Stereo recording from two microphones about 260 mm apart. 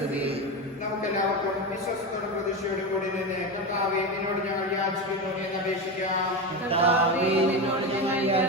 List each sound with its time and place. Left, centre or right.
6.7 s mantra: right